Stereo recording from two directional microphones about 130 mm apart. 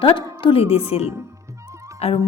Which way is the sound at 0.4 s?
45° left (ahead or behind).